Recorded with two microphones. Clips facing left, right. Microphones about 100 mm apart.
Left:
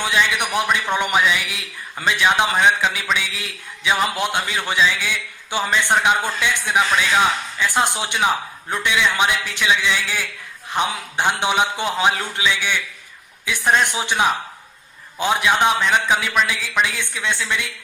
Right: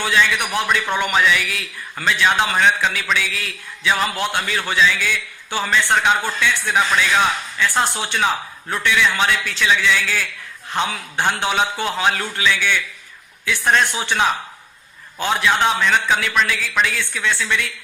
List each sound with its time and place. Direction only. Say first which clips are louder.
0.0 s speech: right 1 dB; 15° left (ahead or behind)